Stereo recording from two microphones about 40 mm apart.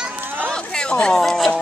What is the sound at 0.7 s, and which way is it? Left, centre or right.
Speech, left.